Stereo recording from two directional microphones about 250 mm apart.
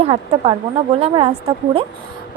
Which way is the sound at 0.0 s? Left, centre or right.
Right.